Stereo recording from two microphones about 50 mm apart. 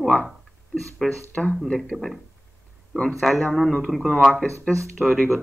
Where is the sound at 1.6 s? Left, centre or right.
Centre.